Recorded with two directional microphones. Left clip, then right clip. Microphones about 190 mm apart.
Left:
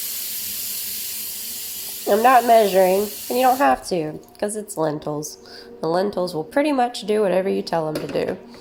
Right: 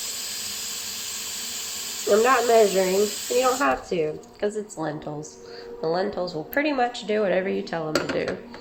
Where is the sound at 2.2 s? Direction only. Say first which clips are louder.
Left 5 dB; 55° left (ahead or behind).